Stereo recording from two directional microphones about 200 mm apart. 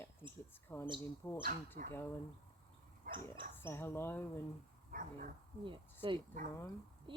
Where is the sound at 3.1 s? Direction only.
45° right (ahead or behind).